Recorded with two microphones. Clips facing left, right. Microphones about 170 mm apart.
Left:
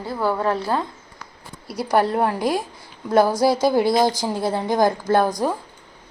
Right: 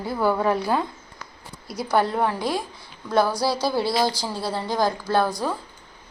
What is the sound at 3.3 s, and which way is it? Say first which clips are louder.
Speech: left 6 dB; 50° left (ahead or behind).